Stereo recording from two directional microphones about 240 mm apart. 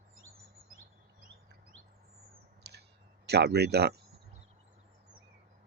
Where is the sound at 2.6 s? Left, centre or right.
Right.